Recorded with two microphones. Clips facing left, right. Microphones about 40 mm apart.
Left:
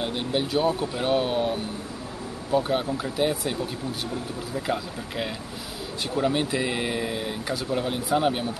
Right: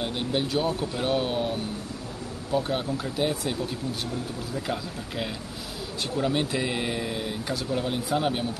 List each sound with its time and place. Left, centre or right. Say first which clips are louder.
0.0 s speech: left 1 dB; centre
4.6 s speech: left 3 dB; centre